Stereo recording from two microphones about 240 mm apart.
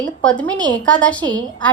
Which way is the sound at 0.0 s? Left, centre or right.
Centre.